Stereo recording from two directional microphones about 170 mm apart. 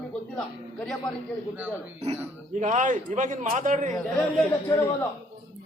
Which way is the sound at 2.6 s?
45° right (ahead or behind).